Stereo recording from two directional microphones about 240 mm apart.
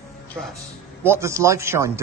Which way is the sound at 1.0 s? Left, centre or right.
Centre.